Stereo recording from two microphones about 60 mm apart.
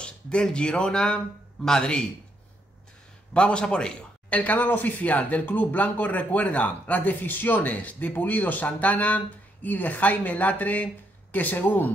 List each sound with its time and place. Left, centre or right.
0.0 s speech: centre
3.3 s a man's voice: centre
4.3 s speech: left